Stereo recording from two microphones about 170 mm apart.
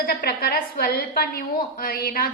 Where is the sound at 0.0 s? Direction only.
65° left (ahead or behind).